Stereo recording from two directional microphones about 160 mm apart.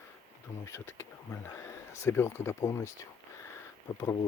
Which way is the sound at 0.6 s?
15° left (ahead or behind).